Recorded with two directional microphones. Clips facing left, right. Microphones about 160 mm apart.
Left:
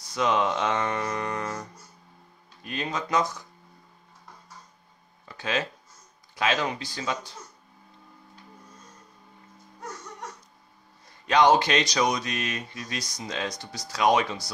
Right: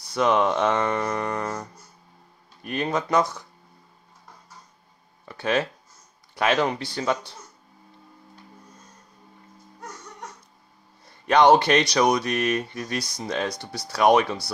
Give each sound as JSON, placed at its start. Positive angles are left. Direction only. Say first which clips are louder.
{"t": 0.1, "sound": "speech", "louder": "right 4 dB", "side_deg": -60}
{"t": 2.8, "sound": "speech", "louder": "right 4 dB", "side_deg": -60}
{"t": 6.3, "sound": "speech", "louder": "right 4 dB", "side_deg": -60}
{"t": 11.2, "sound": "speech", "louder": "right 3 dB", "side_deg": -60}